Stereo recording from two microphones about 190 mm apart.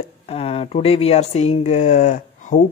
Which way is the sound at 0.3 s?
30° left (ahead or behind).